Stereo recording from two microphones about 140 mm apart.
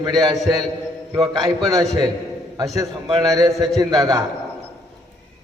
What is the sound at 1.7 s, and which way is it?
A man's voice, 25° right (ahead or behind).